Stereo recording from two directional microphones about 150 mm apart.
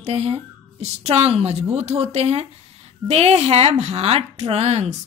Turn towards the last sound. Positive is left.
turn(degrees=-45)  # may be behind; listen again after turning